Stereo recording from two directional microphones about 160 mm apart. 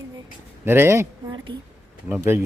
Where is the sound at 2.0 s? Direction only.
10° right (ahead or behind).